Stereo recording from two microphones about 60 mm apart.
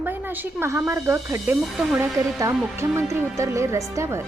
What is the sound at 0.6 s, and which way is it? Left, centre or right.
Speech, right.